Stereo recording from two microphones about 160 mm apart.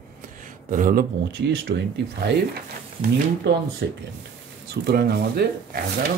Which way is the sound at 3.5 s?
90° right.